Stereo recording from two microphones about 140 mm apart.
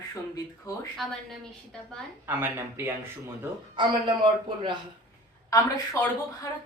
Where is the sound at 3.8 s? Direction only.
35° right (ahead or behind).